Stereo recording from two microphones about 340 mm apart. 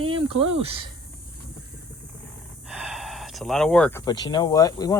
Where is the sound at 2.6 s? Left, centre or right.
Centre.